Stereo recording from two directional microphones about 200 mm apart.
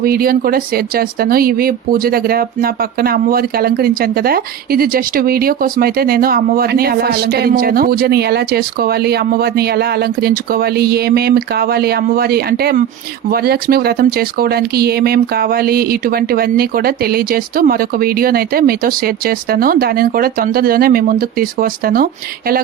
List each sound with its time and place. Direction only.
0.0 s speech: 45° right (ahead or behind)